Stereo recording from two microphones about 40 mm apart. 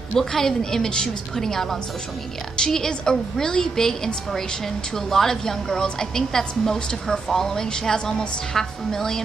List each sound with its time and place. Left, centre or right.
0.1 s a woman's voice: centre